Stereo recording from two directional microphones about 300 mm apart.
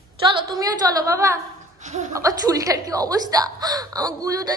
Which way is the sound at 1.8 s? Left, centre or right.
Right.